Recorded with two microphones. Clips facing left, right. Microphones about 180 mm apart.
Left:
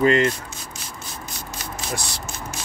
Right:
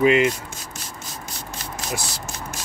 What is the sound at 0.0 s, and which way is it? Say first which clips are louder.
Speech: right 1 dB; 10° right (ahead or behind).